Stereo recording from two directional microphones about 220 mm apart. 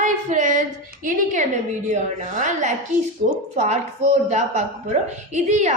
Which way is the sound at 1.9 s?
35° right (ahead or behind).